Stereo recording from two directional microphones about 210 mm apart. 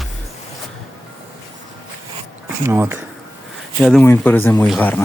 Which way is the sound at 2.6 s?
10° right (ahead or behind).